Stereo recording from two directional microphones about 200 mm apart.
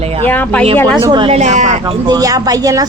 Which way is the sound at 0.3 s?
10° left (ahead or behind).